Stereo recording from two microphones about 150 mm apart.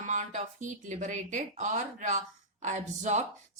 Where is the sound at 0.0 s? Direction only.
55° right (ahead or behind).